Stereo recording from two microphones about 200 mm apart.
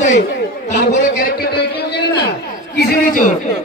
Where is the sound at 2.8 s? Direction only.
45° left (ahead or behind).